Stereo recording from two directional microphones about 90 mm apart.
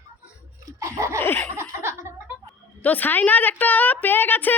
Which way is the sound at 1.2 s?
20° left (ahead or behind).